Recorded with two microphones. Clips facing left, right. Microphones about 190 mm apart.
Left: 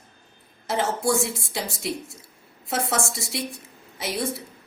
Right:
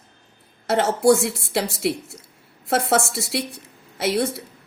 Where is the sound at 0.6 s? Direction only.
70° right (ahead or behind).